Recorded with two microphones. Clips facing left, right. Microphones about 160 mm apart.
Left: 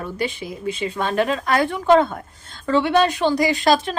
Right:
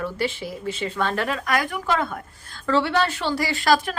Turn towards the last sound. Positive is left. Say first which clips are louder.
# left 3 dB
turn(degrees=20)  # may be behind; listen again after turning